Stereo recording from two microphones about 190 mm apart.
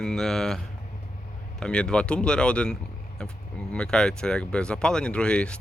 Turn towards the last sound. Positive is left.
turn(degrees=5)  # may be behind; listen again after turning